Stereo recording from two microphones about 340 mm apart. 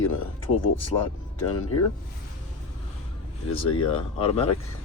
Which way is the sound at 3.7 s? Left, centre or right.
Centre.